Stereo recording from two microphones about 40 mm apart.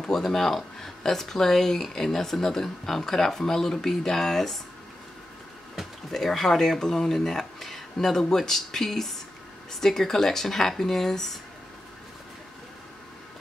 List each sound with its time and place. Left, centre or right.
0.1 s speech: centre
6.2 s speech: centre